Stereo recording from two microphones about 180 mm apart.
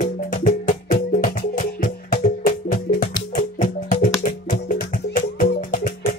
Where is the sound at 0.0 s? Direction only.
50° left (ahead or behind).